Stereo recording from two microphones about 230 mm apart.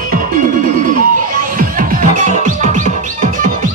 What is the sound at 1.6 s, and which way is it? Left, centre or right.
Music, right.